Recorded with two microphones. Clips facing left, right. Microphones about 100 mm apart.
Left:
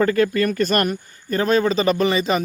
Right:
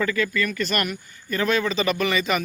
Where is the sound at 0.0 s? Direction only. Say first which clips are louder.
Left 6 dB; 45° left (ahead or behind).